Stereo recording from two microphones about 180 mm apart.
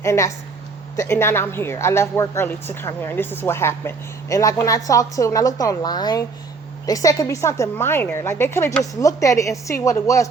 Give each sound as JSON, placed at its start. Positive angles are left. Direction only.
{"t": 0.0, "sound": "a woman's voice", "side_deg": 15}